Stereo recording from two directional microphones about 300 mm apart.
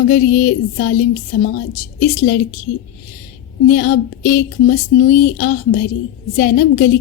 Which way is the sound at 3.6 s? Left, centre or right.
Left.